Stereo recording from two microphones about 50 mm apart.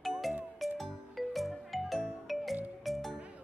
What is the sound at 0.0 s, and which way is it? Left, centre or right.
Music, centre.